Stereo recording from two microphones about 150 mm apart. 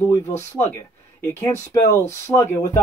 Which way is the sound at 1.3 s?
15° left (ahead or behind).